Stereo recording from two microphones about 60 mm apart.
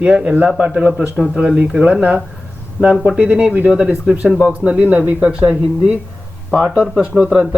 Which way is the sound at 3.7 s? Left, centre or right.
Centre.